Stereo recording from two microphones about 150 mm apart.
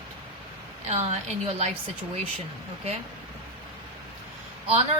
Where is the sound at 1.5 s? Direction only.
45° right (ahead or behind).